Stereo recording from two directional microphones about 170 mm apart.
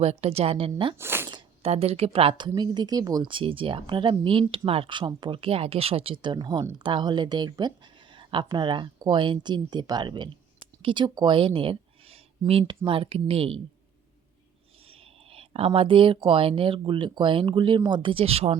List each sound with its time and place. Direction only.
0.0 s speech: 40° right (ahead or behind)
0.9 s speech: 15° right (ahead or behind)
1.3 s zipper: 25° right (ahead or behind)
1.7 s speech: 35° right (ahead or behind)
14.8 s speech: 35° right (ahead or behind)